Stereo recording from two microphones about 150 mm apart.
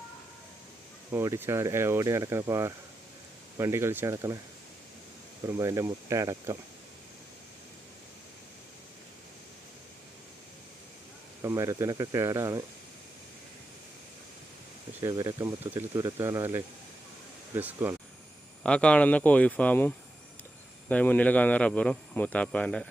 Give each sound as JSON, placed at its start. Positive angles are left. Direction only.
{"t": 1.1, "sound": "speech", "side_deg": -20}
{"t": 5.5, "sound": "speech", "side_deg": -20}
{"t": 11.4, "sound": "speech", "side_deg": -20}
{"t": 15.0, "sound": "speech", "side_deg": -25}
{"t": 18.6, "sound": "a man's voice", "side_deg": 5}